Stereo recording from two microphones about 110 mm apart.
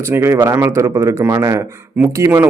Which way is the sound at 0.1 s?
20° right (ahead or behind).